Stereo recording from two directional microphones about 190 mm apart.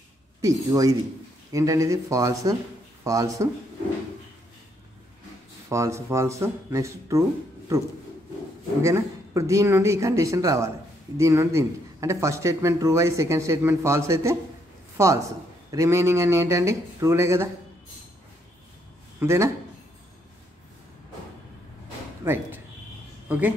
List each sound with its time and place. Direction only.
0.4 s a man's voice: 15° right (ahead or behind)
5.7 s a man's voice: 15° right (ahead or behind)
8.8 s a man's voice: 15° right (ahead or behind)
15.7 s a man's voice: 15° right (ahead or behind)
19.1 s speech: 15° right (ahead or behind)
22.2 s a woman's voice: 10° right (ahead or behind)